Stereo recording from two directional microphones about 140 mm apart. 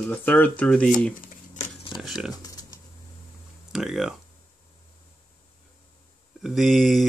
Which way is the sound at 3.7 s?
5° right (ahead or behind).